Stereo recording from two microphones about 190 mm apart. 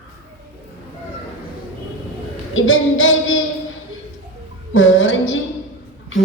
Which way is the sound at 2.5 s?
90° left.